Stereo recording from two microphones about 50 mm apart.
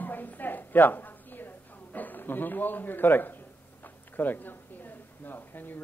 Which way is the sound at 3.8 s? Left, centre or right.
Left.